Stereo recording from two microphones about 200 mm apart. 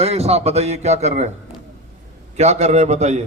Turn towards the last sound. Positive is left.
turn(degrees=-35)  # may be behind; listen again after turning